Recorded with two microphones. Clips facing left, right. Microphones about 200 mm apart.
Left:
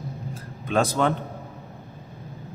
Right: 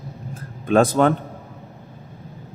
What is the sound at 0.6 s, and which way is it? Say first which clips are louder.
Speech: right 6 dB; 50° right (ahead or behind).